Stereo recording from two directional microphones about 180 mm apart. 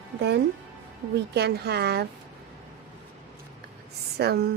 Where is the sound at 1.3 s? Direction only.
65° right (ahead or behind).